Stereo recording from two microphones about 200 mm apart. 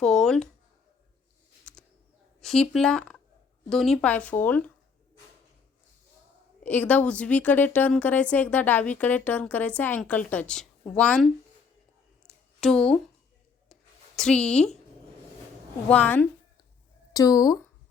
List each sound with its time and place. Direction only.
0.0 s speech: 5° left (ahead or behind)
1.7 s a sound: 5° left (ahead or behind)
2.4 s a woman's voice: centre (ahead or behind)
6.6 s a woman's voice: 10° left (ahead or behind)
12.5 s a woman's voice: 5° left (ahead or behind)
14.2 s speech: 5° left (ahead or behind)
15.9 s a woman's voice: 10° left (ahead or behind)